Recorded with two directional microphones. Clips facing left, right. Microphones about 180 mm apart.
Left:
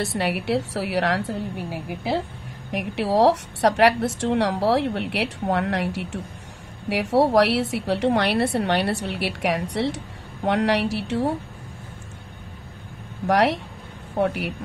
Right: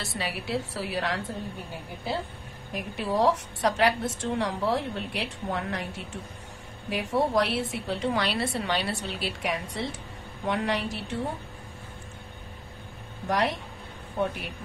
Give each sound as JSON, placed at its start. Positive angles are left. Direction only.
{"t": 0.0, "sound": "a woman's voice", "side_deg": 65}
{"t": 13.3, "sound": "a woman's voice", "side_deg": 75}